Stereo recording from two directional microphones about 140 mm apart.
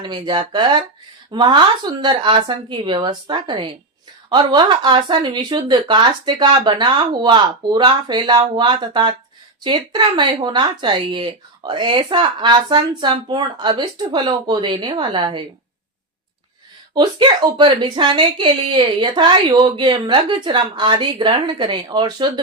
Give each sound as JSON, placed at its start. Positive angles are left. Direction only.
{"t": 0.0, "sound": "speech", "side_deg": -30}
{"t": 16.9, "sound": "speech", "side_deg": -35}